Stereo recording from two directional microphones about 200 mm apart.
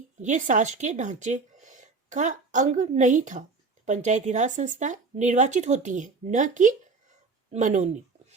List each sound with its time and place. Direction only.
0.2 s speech: 40° right (ahead or behind)